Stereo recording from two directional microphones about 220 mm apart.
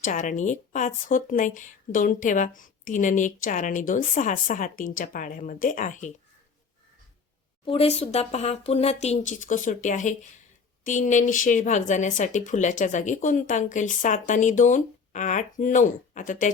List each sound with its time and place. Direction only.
0.0 s speech: 35° left (ahead or behind)
7.6 s speech: 25° left (ahead or behind)